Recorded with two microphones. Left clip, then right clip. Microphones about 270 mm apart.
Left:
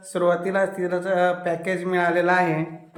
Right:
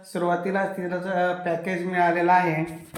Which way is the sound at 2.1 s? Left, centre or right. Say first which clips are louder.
Right 1 dB; left.